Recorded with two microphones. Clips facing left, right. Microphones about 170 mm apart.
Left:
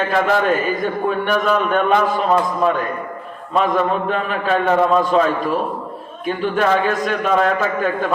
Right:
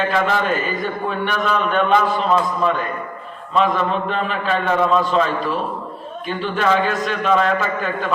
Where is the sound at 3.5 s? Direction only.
50° left (ahead or behind).